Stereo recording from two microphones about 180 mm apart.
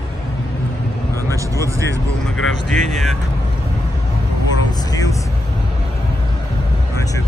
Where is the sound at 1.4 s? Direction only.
15° right (ahead or behind).